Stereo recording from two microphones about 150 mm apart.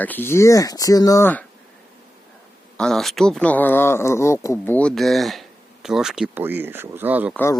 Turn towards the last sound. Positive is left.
turn(degrees=15)  # may be behind; listen again after turning